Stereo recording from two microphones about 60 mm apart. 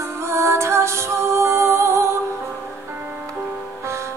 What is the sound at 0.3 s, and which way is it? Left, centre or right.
Music, right.